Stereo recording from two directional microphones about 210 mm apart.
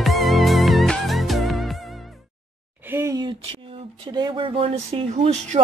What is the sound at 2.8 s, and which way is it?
Speech, 10° right (ahead or behind).